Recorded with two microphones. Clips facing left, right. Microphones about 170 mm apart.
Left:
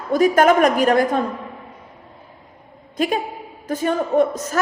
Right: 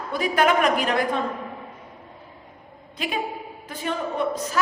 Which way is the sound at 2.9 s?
45° left (ahead or behind).